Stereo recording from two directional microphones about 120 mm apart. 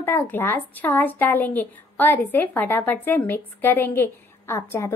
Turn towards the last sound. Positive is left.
turn(degrees=20)  # may be behind; listen again after turning